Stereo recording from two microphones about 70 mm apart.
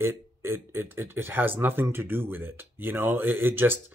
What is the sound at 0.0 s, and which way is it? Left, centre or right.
Speech, right.